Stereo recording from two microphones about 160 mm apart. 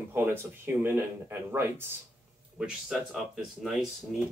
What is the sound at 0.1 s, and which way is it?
Speech, 15° right (ahead or behind).